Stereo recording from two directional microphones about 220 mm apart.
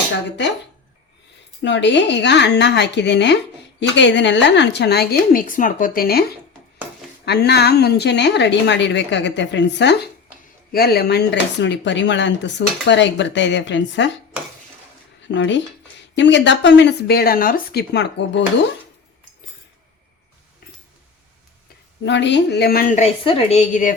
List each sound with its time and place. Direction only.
0.3 s speech: 50° left (ahead or behind)
1.6 s speech: 55° left (ahead or behind)
7.3 s speech: 50° left (ahead or behind)
15.4 s speech: 55° left (ahead or behind)
22.0 s a woman's voice: 55° left (ahead or behind); by 23.9 s 35° left (ahead or behind)